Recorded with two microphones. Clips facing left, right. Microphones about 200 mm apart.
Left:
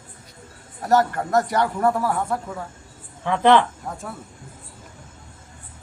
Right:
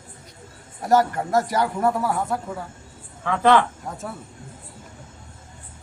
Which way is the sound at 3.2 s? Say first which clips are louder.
Left 1 dB; 20° left (ahead or behind).